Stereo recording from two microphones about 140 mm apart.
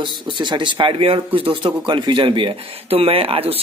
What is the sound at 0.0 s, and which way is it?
A man's voice, 35° right (ahead or behind).